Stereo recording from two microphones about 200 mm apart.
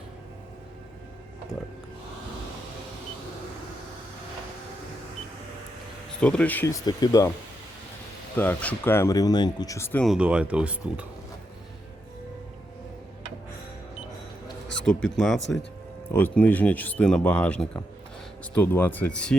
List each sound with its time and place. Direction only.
6.1 s speech: 5° left (ahead or behind)
8.4 s speech: 10° left (ahead or behind)
10.1 s speech: 5° right (ahead or behind)
14.8 s speech: centre (ahead or behind)